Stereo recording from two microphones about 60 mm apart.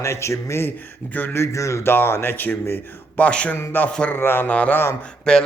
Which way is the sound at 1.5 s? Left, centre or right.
Left.